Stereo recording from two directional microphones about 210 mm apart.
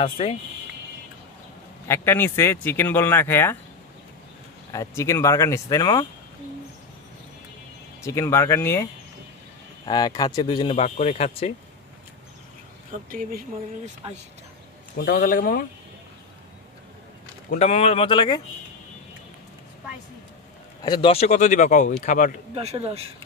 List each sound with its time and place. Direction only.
0.0 s speech: 25° left (ahead or behind)
1.9 s speech: 10° left (ahead or behind)
4.7 s speech: 15° left (ahead or behind)
8.0 s speech: 15° left (ahead or behind)
9.8 s speech: 20° left (ahead or behind)
13.1 s speech: 45° right (ahead or behind)
15.0 s a man's voice: 50° left (ahead or behind)
17.5 s speech: 30° left (ahead or behind)
20.8 s speech: 20° left (ahead or behind); by 22.3 s 40° left (ahead or behind)
22.6 s speech: 30° right (ahead or behind)